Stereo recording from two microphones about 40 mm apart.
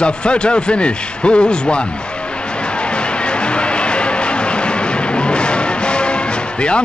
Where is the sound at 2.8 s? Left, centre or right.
Left.